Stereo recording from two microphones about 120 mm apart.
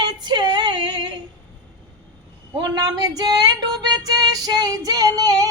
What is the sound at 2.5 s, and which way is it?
Female singing, 35° right (ahead or behind).